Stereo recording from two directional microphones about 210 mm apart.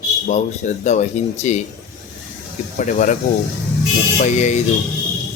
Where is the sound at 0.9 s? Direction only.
35° left (ahead or behind).